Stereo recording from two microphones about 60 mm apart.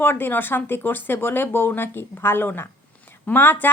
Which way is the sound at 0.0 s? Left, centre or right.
Left.